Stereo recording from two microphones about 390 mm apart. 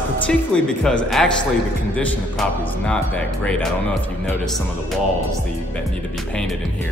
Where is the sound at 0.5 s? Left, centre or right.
Centre.